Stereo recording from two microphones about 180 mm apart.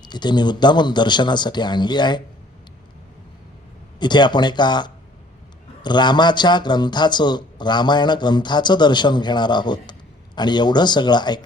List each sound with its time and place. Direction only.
0.0 s a man's voice: 25° left (ahead or behind)
4.0 s a man's voice: 25° left (ahead or behind)